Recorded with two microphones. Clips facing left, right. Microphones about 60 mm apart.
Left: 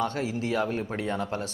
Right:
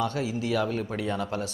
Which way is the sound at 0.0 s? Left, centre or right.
Left.